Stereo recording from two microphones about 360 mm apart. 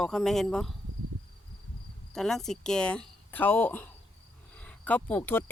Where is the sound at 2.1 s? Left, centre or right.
Centre.